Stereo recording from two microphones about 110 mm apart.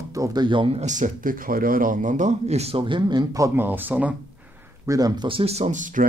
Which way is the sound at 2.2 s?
85° right.